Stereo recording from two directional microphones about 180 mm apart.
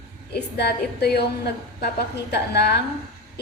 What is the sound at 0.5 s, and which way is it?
A woman's voice, 65° left (ahead or behind).